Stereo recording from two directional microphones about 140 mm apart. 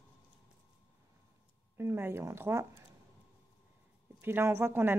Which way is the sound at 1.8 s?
20° right (ahead or behind).